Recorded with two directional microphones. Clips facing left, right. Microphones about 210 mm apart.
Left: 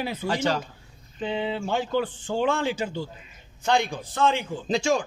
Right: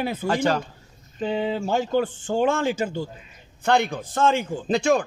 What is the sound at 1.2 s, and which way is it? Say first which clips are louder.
A man's voice: right 3 dB; 40° right (ahead or behind).